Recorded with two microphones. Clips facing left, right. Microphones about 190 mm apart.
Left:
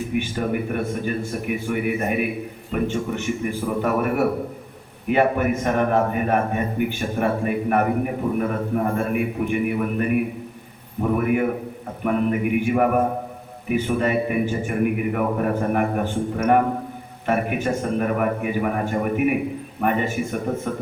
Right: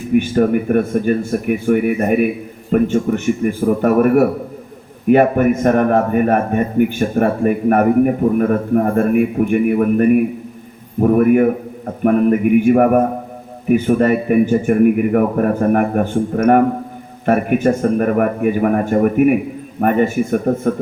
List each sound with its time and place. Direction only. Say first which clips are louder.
0.1 s a man's voice: right 13 dB; 50° right (ahead or behind)
12.0 s a man's voice: right 8 dB; 50° right (ahead or behind)